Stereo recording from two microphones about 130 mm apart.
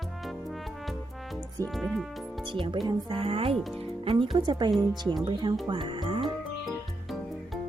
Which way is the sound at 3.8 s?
45° right (ahead or behind).